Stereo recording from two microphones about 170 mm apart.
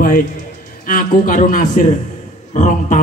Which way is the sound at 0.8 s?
55° left (ahead or behind).